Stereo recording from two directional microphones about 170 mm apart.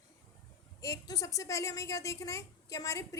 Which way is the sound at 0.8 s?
20° left (ahead or behind).